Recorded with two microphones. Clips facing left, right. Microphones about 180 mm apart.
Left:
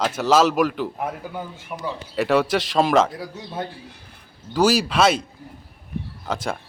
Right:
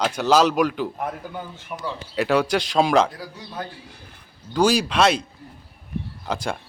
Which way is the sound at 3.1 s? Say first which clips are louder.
Left 3 dB; 25° left (ahead or behind).